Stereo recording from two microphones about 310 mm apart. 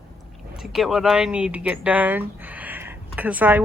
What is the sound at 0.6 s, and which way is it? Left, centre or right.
Speech, centre.